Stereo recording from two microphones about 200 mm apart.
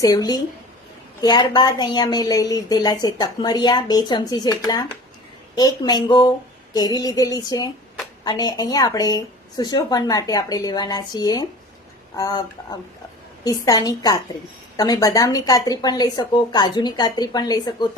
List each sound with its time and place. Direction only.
0.0 s a woman's voice: 15° left (ahead or behind)